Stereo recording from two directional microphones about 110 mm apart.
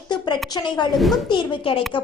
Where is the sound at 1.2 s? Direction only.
45° left (ahead or behind).